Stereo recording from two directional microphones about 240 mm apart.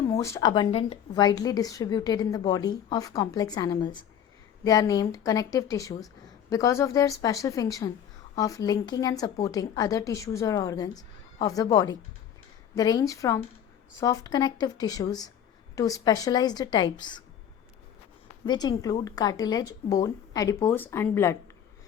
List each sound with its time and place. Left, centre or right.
0.0 s speech: centre
18.4 s speech: centre